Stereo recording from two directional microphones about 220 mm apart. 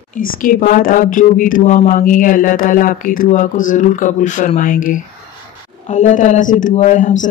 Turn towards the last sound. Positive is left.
turn(degrees=35)  # may be behind; listen again after turning